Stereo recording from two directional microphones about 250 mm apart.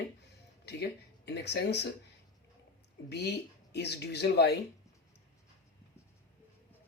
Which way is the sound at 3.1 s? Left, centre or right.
Left.